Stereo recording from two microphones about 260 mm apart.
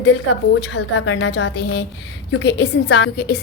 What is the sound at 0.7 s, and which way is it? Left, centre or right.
A woman's voice, left.